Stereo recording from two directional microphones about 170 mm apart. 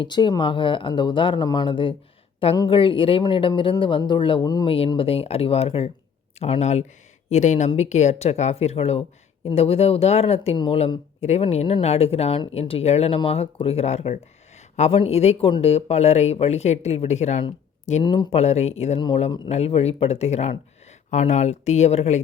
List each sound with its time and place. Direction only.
0.0 s speech: 25° left (ahead or behind); by 17.4 s 40° left (ahead or behind)
18.0 s speech: 25° left (ahead or behind)
19.0 s speech: 30° left (ahead or behind)